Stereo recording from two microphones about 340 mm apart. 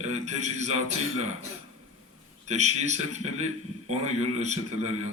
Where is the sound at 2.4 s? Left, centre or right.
Centre.